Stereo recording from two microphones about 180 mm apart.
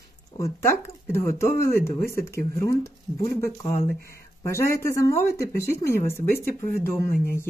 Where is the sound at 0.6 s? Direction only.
15° left (ahead or behind).